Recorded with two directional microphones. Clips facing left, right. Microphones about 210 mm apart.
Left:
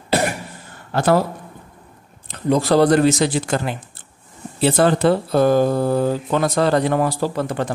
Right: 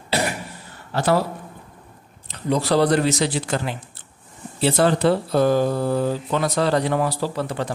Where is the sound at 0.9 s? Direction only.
50° left (ahead or behind).